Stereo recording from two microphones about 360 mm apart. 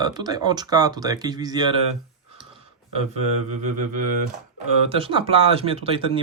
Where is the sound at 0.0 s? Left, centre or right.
Centre.